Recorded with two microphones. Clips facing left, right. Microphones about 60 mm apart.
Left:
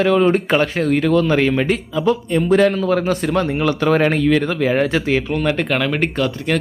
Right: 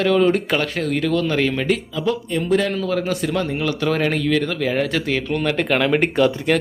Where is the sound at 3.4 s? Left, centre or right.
Left.